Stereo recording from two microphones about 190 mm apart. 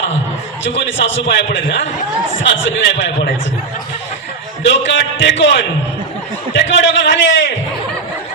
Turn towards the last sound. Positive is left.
turn(degrees=70)  # may be behind; listen again after turning